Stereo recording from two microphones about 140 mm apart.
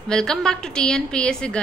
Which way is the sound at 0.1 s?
5° left (ahead or behind).